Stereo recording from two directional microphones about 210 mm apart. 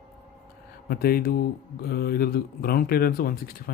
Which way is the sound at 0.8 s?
45° left (ahead or behind).